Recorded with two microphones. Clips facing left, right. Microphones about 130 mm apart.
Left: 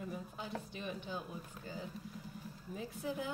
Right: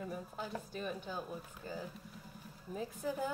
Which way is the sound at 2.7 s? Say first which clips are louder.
Right 2 dB; 45° right (ahead or behind).